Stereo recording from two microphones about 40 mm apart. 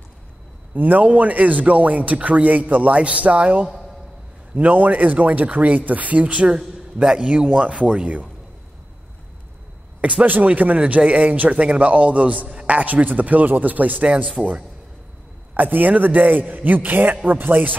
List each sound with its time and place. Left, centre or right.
0.7 s a man's voice: right
7.1 s a man's voice: centre
7.5 s a man's voice: right
10.0 s a man's voice: right
14.0 s a man's voice: right
15.5 s a man's voice: right